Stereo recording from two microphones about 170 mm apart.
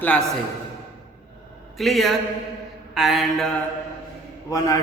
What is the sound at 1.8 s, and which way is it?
A man's voice, centre (ahead or behind).